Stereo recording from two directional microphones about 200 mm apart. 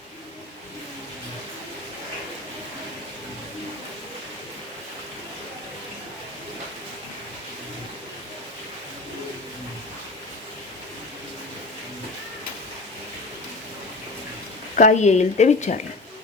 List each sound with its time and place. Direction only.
14.8 s speech: 35° left (ahead or behind)